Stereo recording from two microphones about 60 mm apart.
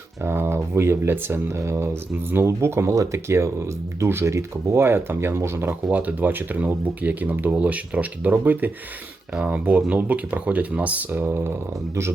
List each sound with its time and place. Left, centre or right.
0.2 s speech: right
2.9 s speech: right
5.9 s speech: right